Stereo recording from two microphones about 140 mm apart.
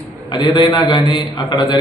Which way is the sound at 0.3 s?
35° left (ahead or behind).